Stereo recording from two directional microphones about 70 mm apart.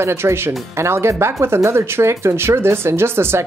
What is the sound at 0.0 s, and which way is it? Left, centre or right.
Speech, right.